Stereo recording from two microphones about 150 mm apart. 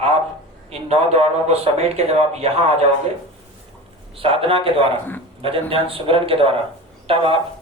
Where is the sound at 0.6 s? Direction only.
45° right (ahead or behind).